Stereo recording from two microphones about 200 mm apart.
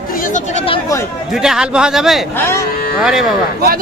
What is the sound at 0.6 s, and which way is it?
Speech, 15° left (ahead or behind).